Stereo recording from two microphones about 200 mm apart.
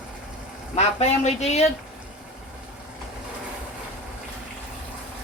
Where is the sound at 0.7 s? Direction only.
35° left (ahead or behind).